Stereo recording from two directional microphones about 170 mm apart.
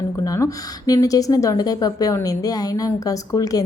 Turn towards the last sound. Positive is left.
turn(degrees=20)  # may be behind; listen again after turning